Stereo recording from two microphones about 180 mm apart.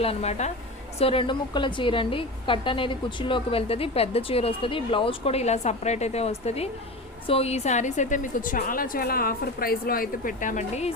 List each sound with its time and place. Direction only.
0.0 s a woman's voice: 35° left (ahead or behind)